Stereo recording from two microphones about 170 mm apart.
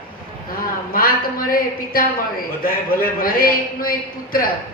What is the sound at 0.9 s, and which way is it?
A woman's voice, 55° left (ahead or behind).